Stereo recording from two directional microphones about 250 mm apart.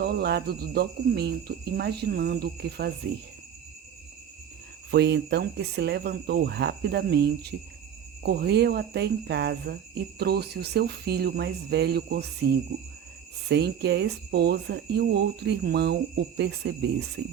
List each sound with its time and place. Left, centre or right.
0.0 s cricket: right
4.9 s cricket: right